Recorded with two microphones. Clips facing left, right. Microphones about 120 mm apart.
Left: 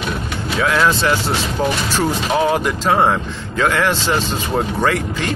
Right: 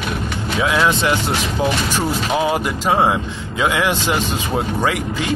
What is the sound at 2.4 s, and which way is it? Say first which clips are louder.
Speech: left 4 dB; 5° right (ahead or behind).